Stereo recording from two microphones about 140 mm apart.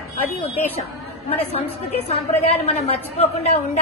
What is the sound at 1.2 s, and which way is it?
A woman's voice, 45° left (ahead or behind).